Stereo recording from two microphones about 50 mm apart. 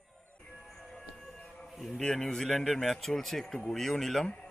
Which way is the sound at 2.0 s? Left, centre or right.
Centre.